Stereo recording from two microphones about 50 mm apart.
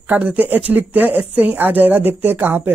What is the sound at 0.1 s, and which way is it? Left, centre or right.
Speech, right.